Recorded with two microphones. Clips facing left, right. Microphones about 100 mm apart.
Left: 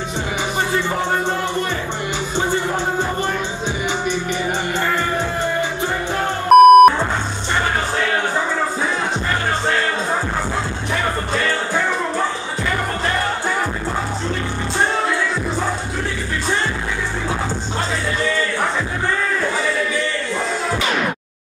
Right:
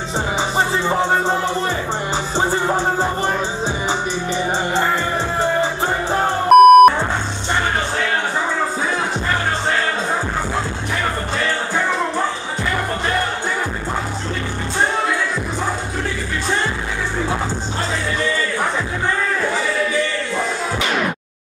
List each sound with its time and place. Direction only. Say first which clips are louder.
0.6 s music: right 3 dB; 30° right (ahead or behind)
2.3 s music: right 2 dB; 35° right (ahead or behind)
4.1 s music: right 1 dB; 30° right (ahead or behind)
6.5 s music: even; centre (ahead or behind)